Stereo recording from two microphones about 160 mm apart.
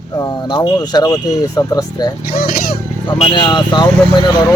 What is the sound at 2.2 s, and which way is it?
Speech, 60° left (ahead or behind).